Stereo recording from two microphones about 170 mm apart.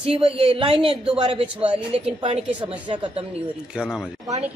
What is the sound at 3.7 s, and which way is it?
Speech, 5° right (ahead or behind).